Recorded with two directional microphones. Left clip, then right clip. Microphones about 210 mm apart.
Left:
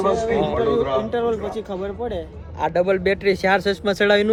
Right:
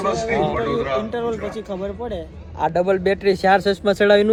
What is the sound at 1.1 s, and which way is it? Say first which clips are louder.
Speech: left 2 dB; 10° left (ahead or behind).